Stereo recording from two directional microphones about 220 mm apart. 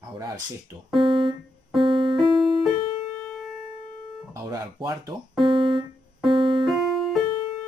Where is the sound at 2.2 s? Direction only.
Centre (ahead or behind).